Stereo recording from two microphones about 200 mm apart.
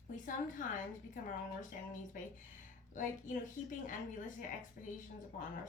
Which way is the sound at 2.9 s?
40° left (ahead or behind).